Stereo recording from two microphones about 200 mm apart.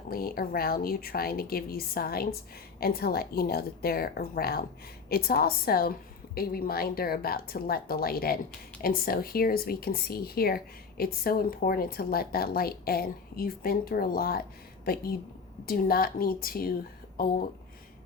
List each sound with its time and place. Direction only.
0.1 s speech: 50° left (ahead or behind)
15.6 s speech: 45° left (ahead or behind)